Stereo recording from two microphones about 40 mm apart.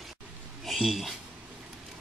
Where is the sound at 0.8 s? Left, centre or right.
Centre.